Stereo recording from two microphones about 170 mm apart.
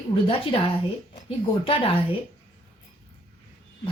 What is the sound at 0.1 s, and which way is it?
Speech, 30° left (ahead or behind).